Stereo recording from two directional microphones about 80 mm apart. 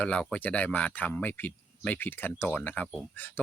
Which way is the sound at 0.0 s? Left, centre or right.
Centre.